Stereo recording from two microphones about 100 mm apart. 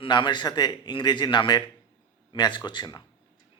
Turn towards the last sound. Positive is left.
turn(degrees=45)  # may be behind; listen again after turning